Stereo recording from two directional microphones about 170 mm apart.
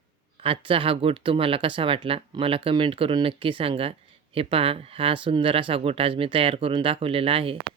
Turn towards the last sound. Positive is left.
turn(degrees=-35)  # may be behind; listen again after turning